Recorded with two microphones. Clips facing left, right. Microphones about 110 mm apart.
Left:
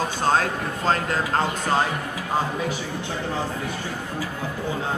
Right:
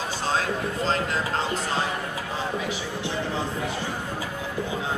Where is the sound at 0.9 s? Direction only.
50° left (ahead or behind).